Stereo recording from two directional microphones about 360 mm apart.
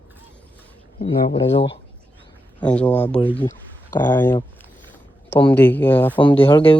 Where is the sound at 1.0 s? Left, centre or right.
Centre.